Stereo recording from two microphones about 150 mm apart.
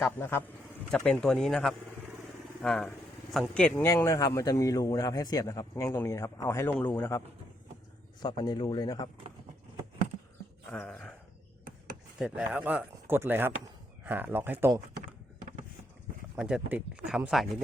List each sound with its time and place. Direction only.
0.0 s a man's voice: 15° left (ahead or behind)
3.8 s a man's voice: 20° left (ahead or behind)
8.2 s a man's voice: 30° left (ahead or behind)
10.7 s a man's voice: 5° left (ahead or behind)
12.2 s speech: 10° right (ahead or behind)
16.3 s speech: 5° right (ahead or behind)